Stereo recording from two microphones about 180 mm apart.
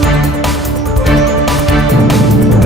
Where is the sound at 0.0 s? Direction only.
Centre (ahead or behind).